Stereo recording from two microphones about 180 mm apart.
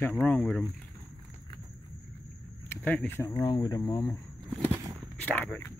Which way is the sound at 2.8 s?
5° left (ahead or behind).